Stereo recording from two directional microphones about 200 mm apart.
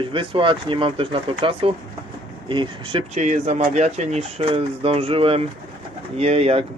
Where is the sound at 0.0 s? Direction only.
25° right (ahead or behind).